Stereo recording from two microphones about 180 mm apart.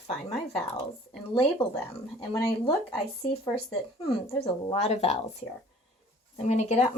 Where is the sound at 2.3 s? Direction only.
30° left (ahead or behind).